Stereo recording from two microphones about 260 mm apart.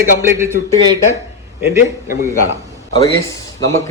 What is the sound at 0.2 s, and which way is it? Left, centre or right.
Speech, centre.